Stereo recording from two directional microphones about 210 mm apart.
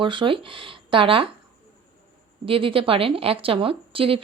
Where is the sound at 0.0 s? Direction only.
25° right (ahead or behind).